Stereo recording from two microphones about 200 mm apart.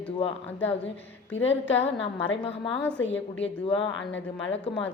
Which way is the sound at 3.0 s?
70° left (ahead or behind).